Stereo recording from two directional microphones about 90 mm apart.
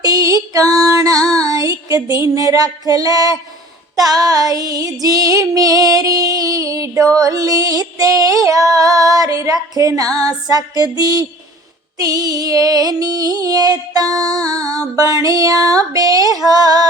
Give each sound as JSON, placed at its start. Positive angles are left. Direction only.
{"t": 0.0, "sound": "music", "side_deg": -45}
{"t": 3.9, "sound": "female singing", "side_deg": -45}
{"t": 10.2, "sound": "music", "side_deg": -45}